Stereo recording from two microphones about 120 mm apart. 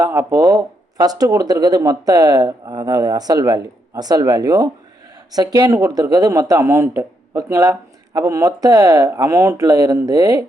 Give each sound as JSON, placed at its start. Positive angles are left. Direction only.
{"t": 0.0, "sound": "a man's voice", "side_deg": -25}